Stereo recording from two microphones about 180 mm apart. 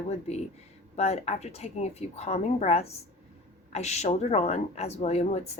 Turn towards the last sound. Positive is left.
turn(degrees=35)  # may be behind; listen again after turning